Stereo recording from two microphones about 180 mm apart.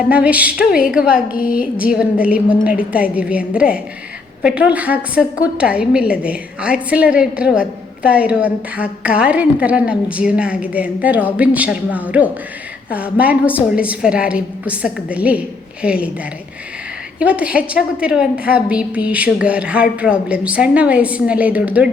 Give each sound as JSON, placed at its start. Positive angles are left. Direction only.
{"t": 0.1, "sound": "a woman's voice", "side_deg": -5}
{"t": 1.1, "sound": "a woman's voice", "side_deg": 50}
{"t": 1.8, "sound": "a woman's voice", "side_deg": -5}
{"t": 17.2, "sound": "a woman's voice", "side_deg": -5}